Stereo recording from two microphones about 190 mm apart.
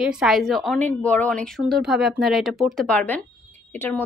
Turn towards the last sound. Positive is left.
turn(degrees=10)  # may be behind; listen again after turning